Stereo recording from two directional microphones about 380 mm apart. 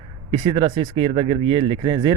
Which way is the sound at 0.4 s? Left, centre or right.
Centre.